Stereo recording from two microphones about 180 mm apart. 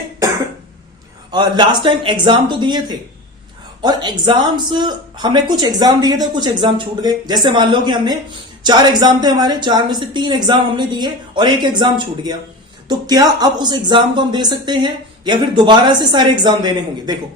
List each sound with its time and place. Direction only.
1.3 s a woman's voice: 25° right (ahead or behind)